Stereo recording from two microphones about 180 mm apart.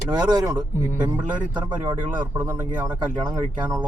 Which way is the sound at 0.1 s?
25° right (ahead or behind).